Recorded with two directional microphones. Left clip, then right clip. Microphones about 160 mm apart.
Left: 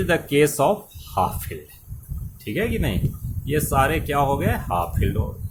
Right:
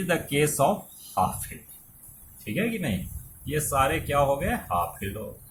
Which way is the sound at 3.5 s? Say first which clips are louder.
Left 4 dB; 55° left (ahead or behind).